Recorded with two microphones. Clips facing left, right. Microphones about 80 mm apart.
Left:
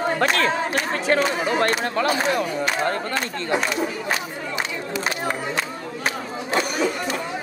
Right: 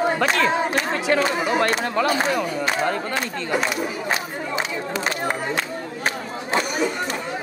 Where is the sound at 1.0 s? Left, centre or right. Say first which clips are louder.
Left 1 dB; left.